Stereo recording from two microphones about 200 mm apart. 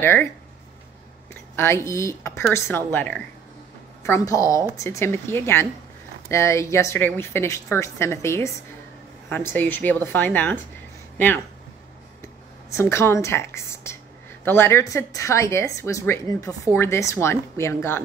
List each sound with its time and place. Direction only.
0.0 s speech: 10° left (ahead or behind)
1.3 s speech: 10° left (ahead or behind)
12.7 s speech: 15° left (ahead or behind)